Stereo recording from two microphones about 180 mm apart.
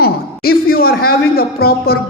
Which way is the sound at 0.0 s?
55° left (ahead or behind).